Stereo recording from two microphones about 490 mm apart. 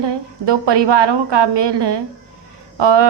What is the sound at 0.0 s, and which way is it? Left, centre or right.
A woman's voice, right.